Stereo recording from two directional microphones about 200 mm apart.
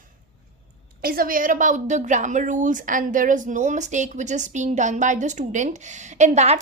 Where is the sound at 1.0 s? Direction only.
45° right (ahead or behind).